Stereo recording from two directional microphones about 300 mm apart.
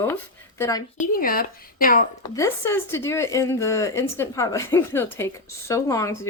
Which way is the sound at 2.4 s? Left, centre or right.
Centre.